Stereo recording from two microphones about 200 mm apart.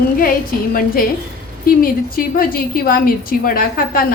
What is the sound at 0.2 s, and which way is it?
A woman's voice, 45° left (ahead or behind).